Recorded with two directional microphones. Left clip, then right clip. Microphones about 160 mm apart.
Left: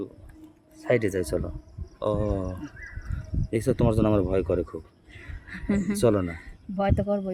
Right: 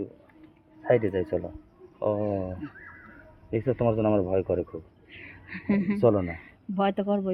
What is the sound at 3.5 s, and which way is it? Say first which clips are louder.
Speech: left 1 dB; 35° left (ahead or behind).